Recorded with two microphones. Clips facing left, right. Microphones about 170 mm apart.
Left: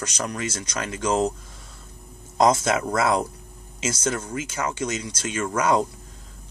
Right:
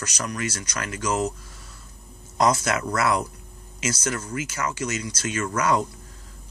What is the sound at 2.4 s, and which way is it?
Speech, 25° left (ahead or behind).